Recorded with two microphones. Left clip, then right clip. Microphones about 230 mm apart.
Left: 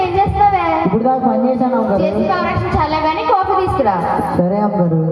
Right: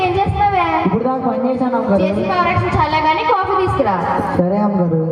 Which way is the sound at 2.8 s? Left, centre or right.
Left.